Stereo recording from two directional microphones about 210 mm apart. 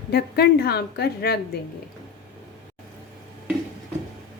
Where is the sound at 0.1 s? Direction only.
50° left (ahead or behind).